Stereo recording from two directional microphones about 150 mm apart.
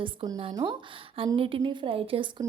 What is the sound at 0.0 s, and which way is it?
A woman's voice, 35° right (ahead or behind).